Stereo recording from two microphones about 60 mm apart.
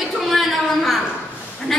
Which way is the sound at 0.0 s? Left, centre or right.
Centre.